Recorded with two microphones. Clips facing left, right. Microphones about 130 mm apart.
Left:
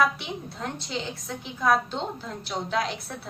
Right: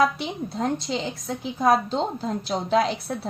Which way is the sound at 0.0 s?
40° right (ahead or behind).